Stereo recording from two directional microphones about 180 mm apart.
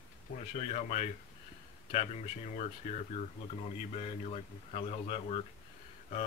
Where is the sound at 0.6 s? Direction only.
40° left (ahead or behind).